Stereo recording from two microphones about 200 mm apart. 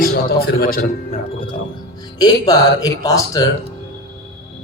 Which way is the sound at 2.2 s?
20° left (ahead or behind).